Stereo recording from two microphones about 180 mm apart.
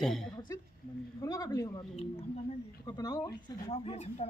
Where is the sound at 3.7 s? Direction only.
35° left (ahead or behind).